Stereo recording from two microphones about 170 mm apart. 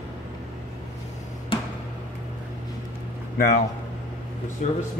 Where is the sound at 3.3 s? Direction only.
60° left (ahead or behind).